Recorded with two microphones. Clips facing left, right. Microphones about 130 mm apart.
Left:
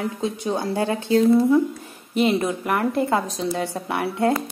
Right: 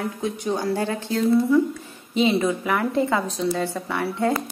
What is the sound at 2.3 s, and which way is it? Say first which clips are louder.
A woman's voice: even; 15° left (ahead or behind).